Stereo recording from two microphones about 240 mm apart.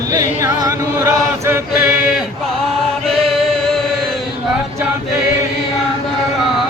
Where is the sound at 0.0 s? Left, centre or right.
Centre.